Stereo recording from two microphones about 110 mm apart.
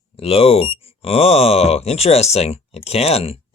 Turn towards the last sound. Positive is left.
turn(degrees=65)  # may be behind; listen again after turning